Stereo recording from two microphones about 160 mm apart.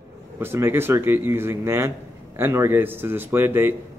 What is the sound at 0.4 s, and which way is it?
A man's voice, 15° right (ahead or behind).